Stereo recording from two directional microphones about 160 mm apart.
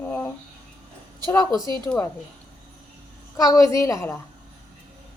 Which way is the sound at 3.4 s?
20° left (ahead or behind).